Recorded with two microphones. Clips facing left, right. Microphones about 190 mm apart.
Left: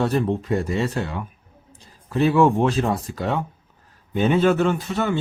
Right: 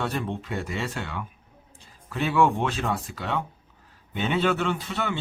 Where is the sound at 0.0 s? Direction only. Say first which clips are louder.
Left 8 dB; 40° left (ahead or behind).